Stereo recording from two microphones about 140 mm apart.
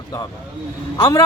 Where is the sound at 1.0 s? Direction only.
25° left (ahead or behind).